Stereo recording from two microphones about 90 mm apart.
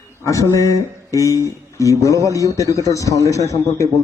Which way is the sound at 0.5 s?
35° left (ahead or behind).